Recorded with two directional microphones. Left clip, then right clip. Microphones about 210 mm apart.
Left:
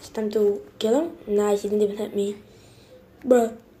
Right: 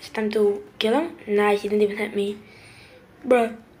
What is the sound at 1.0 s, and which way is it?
Speech, 20° left (ahead or behind).